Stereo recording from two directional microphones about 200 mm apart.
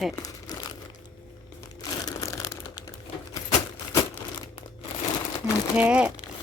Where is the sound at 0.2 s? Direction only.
20° left (ahead or behind).